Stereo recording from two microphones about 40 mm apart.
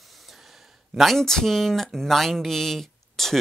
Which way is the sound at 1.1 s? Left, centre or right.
Centre.